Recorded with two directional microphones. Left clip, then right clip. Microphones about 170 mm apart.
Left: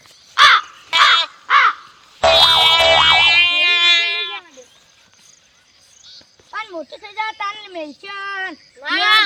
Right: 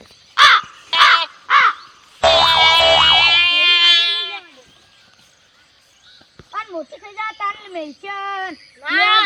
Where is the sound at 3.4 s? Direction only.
25° left (ahead or behind).